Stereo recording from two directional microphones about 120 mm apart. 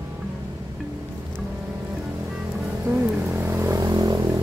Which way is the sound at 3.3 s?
20° right (ahead or behind).